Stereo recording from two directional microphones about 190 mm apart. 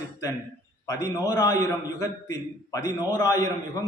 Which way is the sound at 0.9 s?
20° left (ahead or behind).